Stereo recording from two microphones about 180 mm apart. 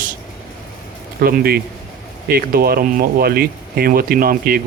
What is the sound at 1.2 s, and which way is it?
Speech, 55° right (ahead or behind).